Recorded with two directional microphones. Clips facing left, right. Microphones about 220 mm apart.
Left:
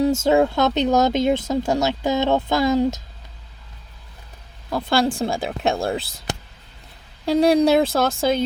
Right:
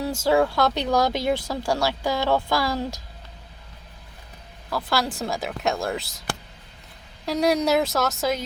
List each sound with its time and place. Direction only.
0.0 s speech: 25° left (ahead or behind)
4.7 s speech: 25° left (ahead or behind)
6.3 s whispering: 20° left (ahead or behind)
7.3 s speech: 30° left (ahead or behind)